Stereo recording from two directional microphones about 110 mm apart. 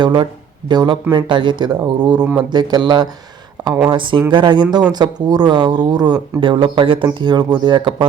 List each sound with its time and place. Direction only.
0.0 s speech: 45° right (ahead or behind)
2.2 s speech: 10° right (ahead or behind)
2.5 s speech: 40° right (ahead or behind)